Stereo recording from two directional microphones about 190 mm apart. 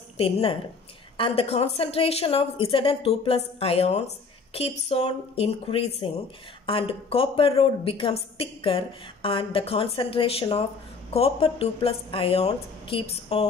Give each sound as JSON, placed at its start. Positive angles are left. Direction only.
{"t": 0.2, "sound": "a woman's voice", "side_deg": 30}